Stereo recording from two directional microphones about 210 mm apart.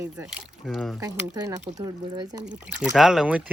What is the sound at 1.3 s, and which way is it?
Speech, 15° right (ahead or behind).